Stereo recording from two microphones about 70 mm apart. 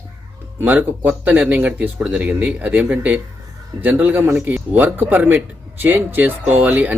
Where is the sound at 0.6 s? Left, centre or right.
Right.